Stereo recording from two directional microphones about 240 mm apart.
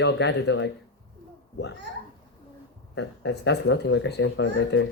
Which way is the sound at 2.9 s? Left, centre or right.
Left.